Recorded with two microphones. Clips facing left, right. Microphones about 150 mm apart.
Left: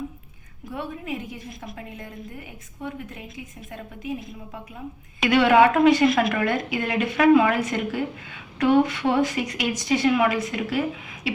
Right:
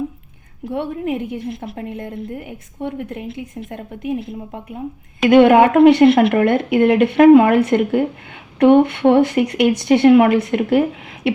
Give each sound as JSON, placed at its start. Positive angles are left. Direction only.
{"t": 0.6, "sound": "a woman's voice", "side_deg": -65}
{"t": 5.3, "sound": "a woman's voice", "side_deg": -50}